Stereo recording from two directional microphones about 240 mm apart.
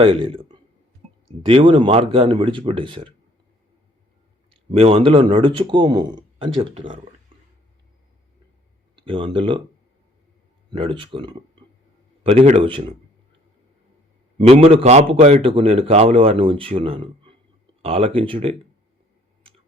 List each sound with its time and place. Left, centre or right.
0.0 s a man's voice: right
4.7 s a man's voice: right
9.0 s speech: right
10.7 s a man's voice: right
14.3 s a man's voice: right
19.4 s a sound: right